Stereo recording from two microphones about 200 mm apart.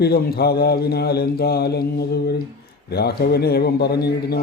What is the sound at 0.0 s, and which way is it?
A man's voice, 50° left (ahead or behind).